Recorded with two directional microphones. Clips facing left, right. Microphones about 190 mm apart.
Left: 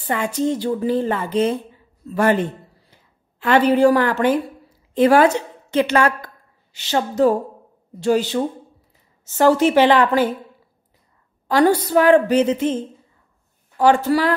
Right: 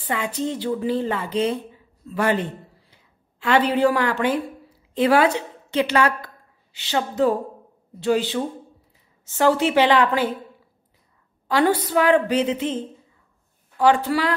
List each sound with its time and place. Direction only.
0.0 s a woman's voice: 45° left (ahead or behind)
3.3 s a woman's voice: 50° left (ahead or behind)
11.4 s a woman's voice: 40° left (ahead or behind)
13.7 s a woman's voice: 45° left (ahead or behind)